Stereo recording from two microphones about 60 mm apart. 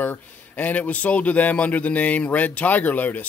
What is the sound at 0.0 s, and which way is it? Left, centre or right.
Speech, left.